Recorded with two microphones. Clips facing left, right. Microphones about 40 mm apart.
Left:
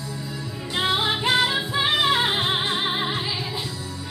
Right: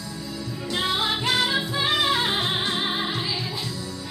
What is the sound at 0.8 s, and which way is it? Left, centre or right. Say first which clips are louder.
Music: left 3 dB; centre.